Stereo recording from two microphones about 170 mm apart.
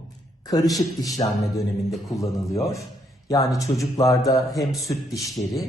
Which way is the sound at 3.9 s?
20° left (ahead or behind).